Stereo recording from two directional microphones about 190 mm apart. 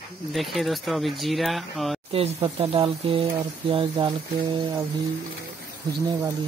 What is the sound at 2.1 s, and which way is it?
Speech, 30° right (ahead or behind).